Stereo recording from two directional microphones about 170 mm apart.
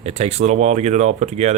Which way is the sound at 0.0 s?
40° right (ahead or behind).